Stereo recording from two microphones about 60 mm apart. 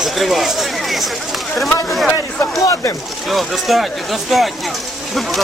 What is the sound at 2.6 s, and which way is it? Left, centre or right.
Speech, left.